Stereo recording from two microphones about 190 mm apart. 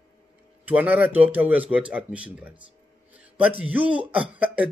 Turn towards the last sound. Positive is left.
turn(degrees=-10)  # may be behind; listen again after turning